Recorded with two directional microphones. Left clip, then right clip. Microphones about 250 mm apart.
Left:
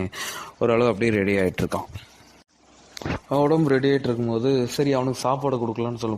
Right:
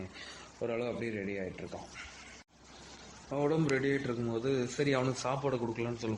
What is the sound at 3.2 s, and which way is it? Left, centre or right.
A man's voice, left.